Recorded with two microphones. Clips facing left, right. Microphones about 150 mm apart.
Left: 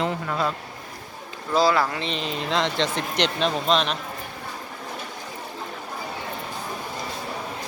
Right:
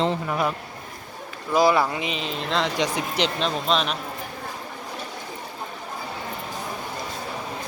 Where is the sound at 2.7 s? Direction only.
10° right (ahead or behind).